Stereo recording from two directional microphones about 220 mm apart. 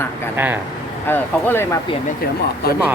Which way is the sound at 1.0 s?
10° left (ahead or behind).